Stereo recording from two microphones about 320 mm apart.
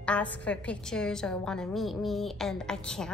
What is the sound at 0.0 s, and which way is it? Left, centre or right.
A woman's voice, centre.